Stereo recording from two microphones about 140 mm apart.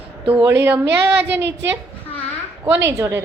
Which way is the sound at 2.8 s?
20° right (ahead or behind).